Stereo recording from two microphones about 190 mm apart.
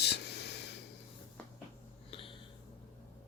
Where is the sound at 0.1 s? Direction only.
60° left (ahead or behind).